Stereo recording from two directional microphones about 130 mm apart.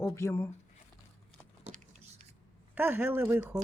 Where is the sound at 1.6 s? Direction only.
70° right (ahead or behind).